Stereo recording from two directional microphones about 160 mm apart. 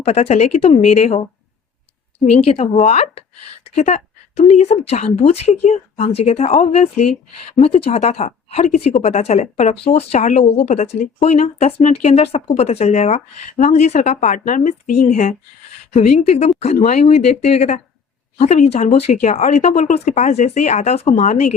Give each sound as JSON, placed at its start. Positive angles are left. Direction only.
{"t": 0.0, "sound": "speech", "side_deg": 40}
{"t": 2.8, "sound": "speech", "side_deg": 40}